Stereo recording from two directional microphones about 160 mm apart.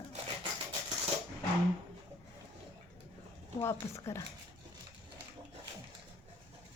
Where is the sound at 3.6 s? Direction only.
15° left (ahead or behind).